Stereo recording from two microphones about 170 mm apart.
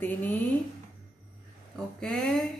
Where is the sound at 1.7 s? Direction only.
5° left (ahead or behind).